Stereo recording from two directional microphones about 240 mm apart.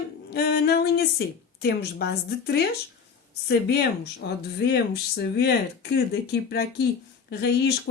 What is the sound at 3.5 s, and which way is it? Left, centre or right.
Speech, left.